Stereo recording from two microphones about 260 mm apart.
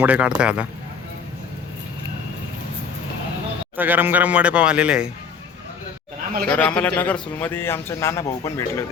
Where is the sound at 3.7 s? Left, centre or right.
Centre.